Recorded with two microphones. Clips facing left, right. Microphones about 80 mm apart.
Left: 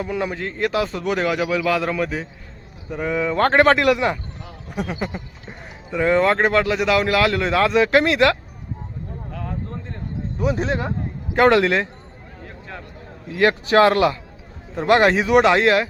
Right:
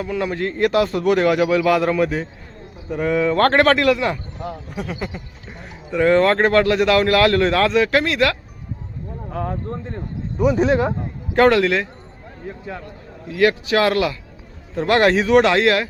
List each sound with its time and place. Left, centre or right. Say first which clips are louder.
0.0 s speech: right 1 dB; centre
0.3 s a man's voice: right 8 dB; centre
3.7 s speech: even; centre
5.5 s speech: right 2 dB; centre
7.6 s speech: left 1 dB; left
10.3 s a man's voice: right 5 dB; centre
11.4 s speech: left 1 dB; left
13.3 s speech: left 1 dB; left
15.0 s speech: right 3 dB; centre